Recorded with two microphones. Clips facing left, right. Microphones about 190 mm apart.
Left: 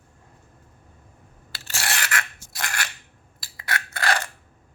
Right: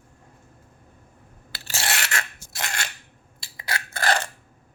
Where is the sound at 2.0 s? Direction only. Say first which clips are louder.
Left 1 dB; 25° right (ahead or behind).